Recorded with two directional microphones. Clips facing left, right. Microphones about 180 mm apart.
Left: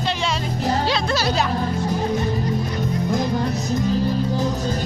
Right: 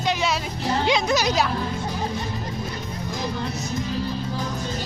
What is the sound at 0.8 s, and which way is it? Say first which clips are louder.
Music: right 1 dB; 15° right (ahead or behind).